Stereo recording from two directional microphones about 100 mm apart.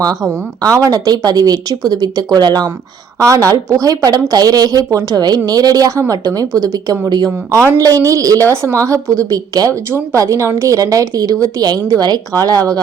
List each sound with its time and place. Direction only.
0.6 s a woman's voice: 35° right (ahead or behind)
7.3 s speech: 25° right (ahead or behind)
7.8 s a woman's voice: 35° right (ahead or behind)